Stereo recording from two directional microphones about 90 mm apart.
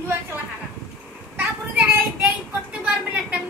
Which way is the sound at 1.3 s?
20° right (ahead or behind).